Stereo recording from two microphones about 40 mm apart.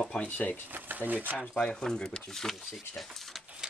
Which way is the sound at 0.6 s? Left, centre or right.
Right.